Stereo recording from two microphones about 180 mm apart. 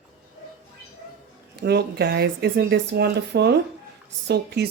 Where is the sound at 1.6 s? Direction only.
65° right (ahead or behind).